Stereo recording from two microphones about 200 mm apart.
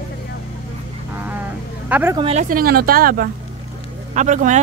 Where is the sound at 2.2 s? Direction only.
30° right (ahead or behind).